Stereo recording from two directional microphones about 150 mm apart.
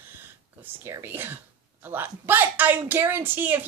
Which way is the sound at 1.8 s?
15° right (ahead or behind).